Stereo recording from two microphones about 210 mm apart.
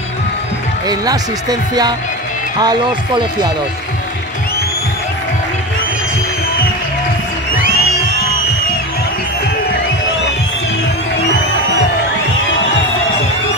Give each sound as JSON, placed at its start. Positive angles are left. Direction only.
{"t": 0.8, "sound": "speech", "side_deg": -20}